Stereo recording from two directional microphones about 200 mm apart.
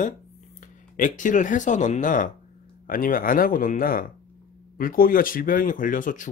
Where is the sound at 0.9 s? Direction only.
40° left (ahead or behind).